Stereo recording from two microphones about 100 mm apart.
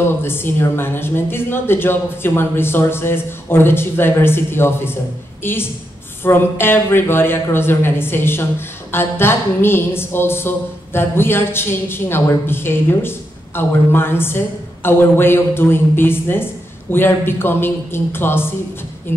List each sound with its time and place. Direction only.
0.0 s a woman's voice: 25° left (ahead or behind)